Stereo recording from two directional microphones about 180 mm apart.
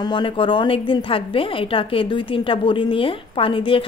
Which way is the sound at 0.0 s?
25° left (ahead or behind).